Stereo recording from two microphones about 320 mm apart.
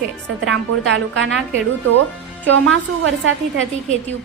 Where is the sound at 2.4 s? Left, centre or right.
Right.